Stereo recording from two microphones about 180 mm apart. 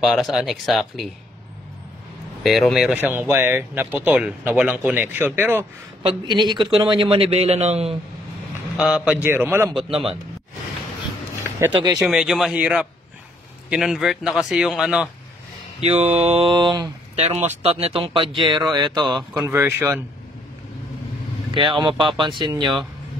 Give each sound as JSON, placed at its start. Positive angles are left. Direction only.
{"t": 0.0, "sound": "speech", "side_deg": 0}
{"t": 2.4, "sound": "speech", "side_deg": 0}
{"t": 6.0, "sound": "a man's voice", "side_deg": -25}
{"t": 8.7, "sound": "speech", "side_deg": -5}
{"t": 9.8, "sound": "speech", "side_deg": -30}
{"t": 12.0, "sound": "speech", "side_deg": 0}
{"t": 15.8, "sound": "speech", "side_deg": -35}
{"t": 17.1, "sound": "a man's voice", "side_deg": -35}
{"t": 19.4, "sound": "speech", "side_deg": -15}
{"t": 21.5, "sound": "a man's voice", "side_deg": -25}